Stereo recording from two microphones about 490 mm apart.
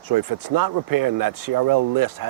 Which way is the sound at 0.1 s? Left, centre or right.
Right.